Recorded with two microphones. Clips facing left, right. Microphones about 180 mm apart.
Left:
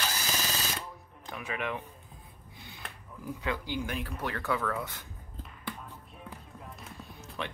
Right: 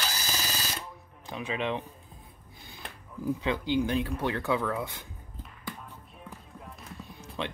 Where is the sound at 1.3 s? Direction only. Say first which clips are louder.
Right 4 dB; 25° right (ahead or behind).